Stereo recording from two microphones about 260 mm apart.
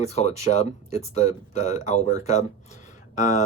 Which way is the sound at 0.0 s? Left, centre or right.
Left.